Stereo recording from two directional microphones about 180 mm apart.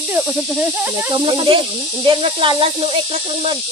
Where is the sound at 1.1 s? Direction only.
30° right (ahead or behind).